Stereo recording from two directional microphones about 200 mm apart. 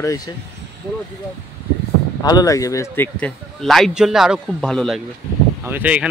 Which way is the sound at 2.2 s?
15° left (ahead or behind).